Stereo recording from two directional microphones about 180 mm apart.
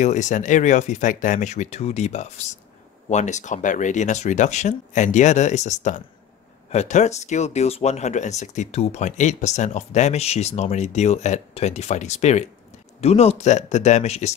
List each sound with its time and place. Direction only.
0.0 s speech: 40° left (ahead or behind)